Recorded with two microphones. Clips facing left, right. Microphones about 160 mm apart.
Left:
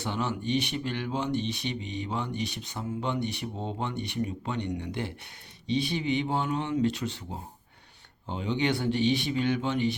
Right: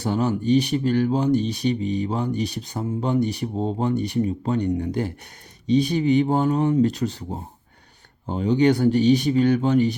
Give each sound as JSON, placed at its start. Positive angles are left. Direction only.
{"t": 0.0, "sound": "speech", "side_deg": -40}